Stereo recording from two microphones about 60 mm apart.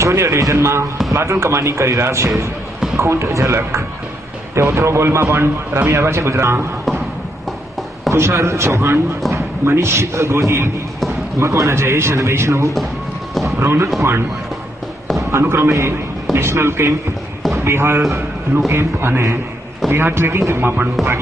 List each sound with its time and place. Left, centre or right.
0.0 s a man's voice: right
8.1 s a man's voice: right
13.3 s a sound: centre
13.6 s speech: right
15.4 s a man's voice: right
17.4 s a sound: centre
17.6 s a man's voice: right